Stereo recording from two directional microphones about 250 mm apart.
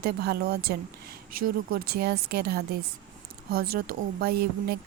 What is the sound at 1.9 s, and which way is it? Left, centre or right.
Speech, right.